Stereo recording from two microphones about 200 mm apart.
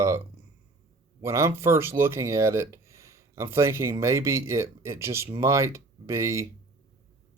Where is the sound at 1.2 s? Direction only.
15° right (ahead or behind).